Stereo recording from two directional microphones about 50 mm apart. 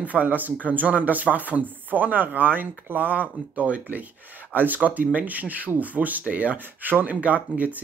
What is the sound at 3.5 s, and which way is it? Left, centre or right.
Speech, right.